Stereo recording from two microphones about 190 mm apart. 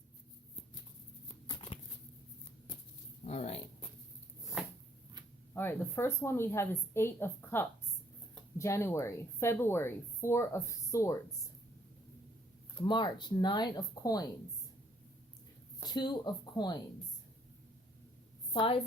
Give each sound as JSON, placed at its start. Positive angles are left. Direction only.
{"t": 1.5, "sound": "a sound", "side_deg": 30}
{"t": 3.2, "sound": "speech", "side_deg": 35}
{"t": 4.6, "sound": "a sound", "side_deg": -5}
{"t": 5.5, "sound": "a woman's voice", "side_deg": 10}
{"t": 12.8, "sound": "speech", "side_deg": 25}
{"t": 15.8, "sound": "speech", "side_deg": 20}
{"t": 18.5, "sound": "a woman's voice", "side_deg": 30}